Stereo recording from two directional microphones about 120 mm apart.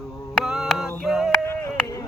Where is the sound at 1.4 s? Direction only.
25° left (ahead or behind).